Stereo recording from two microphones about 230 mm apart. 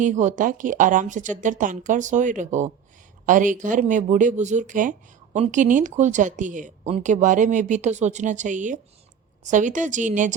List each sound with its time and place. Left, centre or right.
0.0 s speech: right